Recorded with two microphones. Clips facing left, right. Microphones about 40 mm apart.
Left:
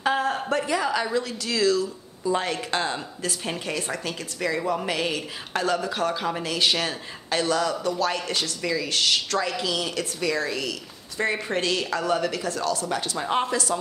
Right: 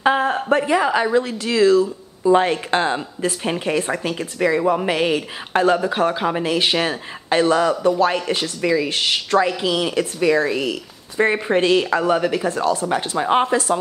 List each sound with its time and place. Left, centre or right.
0.0 s a woman's voice: right